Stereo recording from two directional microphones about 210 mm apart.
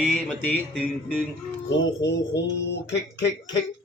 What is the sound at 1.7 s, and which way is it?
Speech, 55° left (ahead or behind).